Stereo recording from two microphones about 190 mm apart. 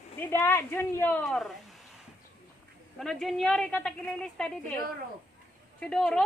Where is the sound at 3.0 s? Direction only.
Centre (ahead or behind).